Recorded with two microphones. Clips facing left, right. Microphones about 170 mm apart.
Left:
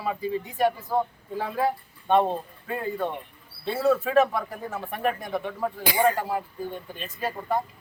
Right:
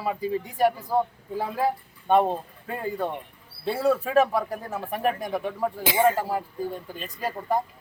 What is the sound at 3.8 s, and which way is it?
Speech, 10° right (ahead or behind).